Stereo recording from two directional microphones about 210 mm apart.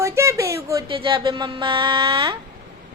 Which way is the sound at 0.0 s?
15° right (ahead or behind).